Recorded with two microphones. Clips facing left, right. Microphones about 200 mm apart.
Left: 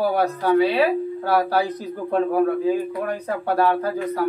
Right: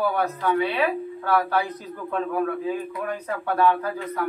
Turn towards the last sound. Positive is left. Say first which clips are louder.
# left 5 dB
turn(degrees=35)  # may be behind; listen again after turning